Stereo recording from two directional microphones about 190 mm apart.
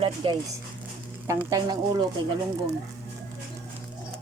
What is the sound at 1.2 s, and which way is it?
Speech, 20° right (ahead or behind).